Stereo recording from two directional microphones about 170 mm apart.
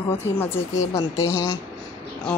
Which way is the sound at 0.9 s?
15° left (ahead or behind).